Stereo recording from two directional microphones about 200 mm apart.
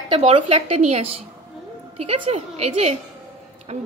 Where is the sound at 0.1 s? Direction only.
30° right (ahead or behind).